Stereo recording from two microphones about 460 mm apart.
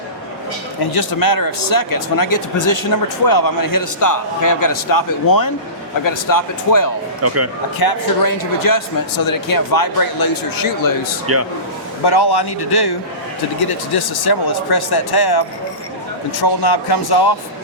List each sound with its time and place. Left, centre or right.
0.9 s speech: left
7.2 s speech: right
7.8 s speech: left
11.3 s a man's voice: right
12.0 s a man's voice: left